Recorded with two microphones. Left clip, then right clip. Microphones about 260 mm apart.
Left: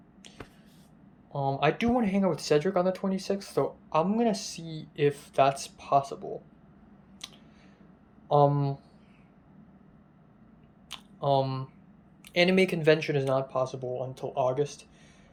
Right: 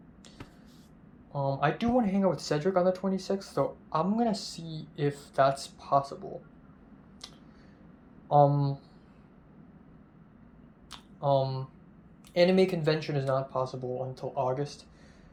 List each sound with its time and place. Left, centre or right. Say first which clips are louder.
1.3 s speech: left 2 dB; centre
5.9 s speech: left 2 dB; left
8.3 s speech: even; centre
10.8 s a sound: left 1 dB; centre
12.3 s speech: even; centre